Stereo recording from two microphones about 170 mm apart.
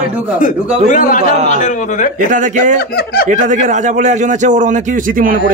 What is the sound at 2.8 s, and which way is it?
Speech, 65° left (ahead or behind).